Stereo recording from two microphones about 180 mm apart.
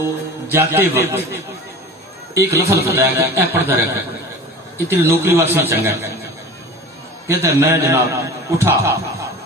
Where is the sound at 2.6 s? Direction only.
60° left (ahead or behind).